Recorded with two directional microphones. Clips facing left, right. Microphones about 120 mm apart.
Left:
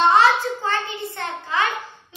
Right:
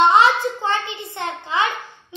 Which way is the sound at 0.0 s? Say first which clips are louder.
Right 1 dB; 20° right (ahead or behind).